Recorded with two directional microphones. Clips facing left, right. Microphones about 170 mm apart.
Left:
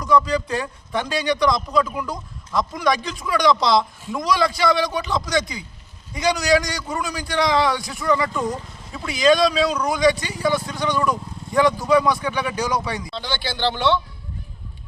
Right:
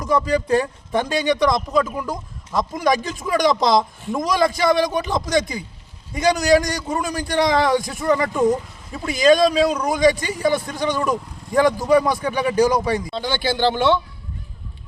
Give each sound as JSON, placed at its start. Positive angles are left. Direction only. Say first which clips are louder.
{"t": 0.3, "sound": "a man's voice", "louder": "right 5 dB", "side_deg": -50}
{"t": 8.3, "sound": "speech", "louder": "right 7 dB", "side_deg": -25}
{"t": 9.0, "sound": "a man's voice", "louder": "right 2 dB", "side_deg": -45}